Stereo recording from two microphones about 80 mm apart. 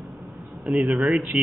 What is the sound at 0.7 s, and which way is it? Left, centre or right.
Speech, centre.